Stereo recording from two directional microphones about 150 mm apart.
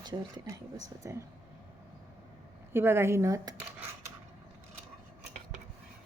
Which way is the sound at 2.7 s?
15° right (ahead or behind).